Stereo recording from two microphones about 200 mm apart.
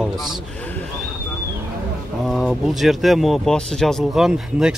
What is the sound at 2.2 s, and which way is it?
Speech, centre (ahead or behind).